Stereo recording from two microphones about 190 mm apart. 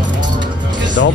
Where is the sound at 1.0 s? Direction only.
65° left (ahead or behind).